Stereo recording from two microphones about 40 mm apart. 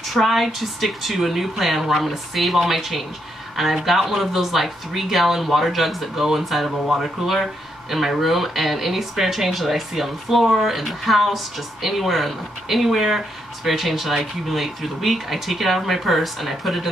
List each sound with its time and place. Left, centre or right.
0.1 s speech: centre